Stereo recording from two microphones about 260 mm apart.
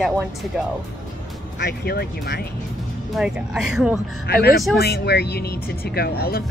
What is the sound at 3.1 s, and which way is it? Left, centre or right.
Speech, centre.